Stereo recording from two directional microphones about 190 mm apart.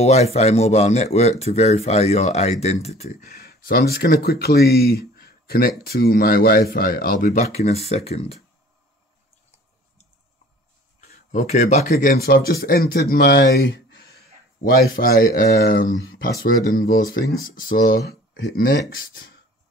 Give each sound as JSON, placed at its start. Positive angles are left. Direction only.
{"t": 0.0, "sound": "speech", "side_deg": 35}
{"t": 3.1, "sound": "speech", "side_deg": 50}
{"t": 11.0, "sound": "a sound", "side_deg": 40}
{"t": 11.9, "sound": "speech", "side_deg": 50}